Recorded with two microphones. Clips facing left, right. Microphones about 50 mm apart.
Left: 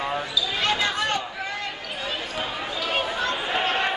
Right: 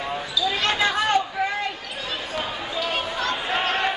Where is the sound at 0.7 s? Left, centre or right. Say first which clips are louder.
Right 4 dB; centre.